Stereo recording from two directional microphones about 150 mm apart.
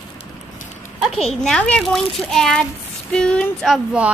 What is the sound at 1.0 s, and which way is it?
A child's voice, centre (ahead or behind).